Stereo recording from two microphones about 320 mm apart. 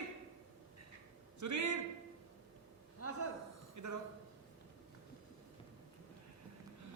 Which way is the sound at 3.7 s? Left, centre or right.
Right.